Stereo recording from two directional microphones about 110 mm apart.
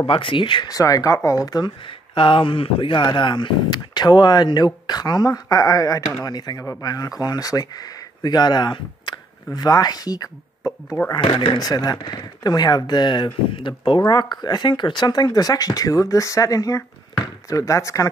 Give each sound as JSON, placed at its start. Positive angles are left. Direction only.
{"t": 0.0, "sound": "speech", "side_deg": 50}
{"t": 0.7, "sound": "speech", "side_deg": 35}
{"t": 2.1, "sound": "speech", "side_deg": 50}
{"t": 11.1, "sound": "speech", "side_deg": 50}
{"t": 11.5, "sound": "speech", "side_deg": 35}